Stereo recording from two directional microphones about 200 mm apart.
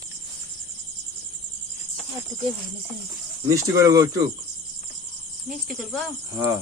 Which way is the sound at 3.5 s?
15° right (ahead or behind).